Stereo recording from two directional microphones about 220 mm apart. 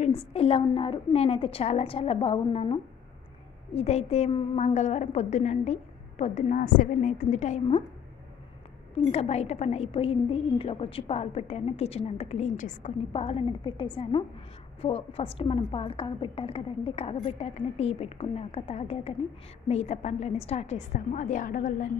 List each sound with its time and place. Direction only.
0.0 s a woman's voice: 30° left (ahead or behind)
8.9 s a woman's voice: 30° left (ahead or behind)